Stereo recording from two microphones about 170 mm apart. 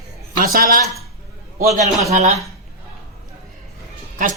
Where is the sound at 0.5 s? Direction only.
60° right (ahead or behind).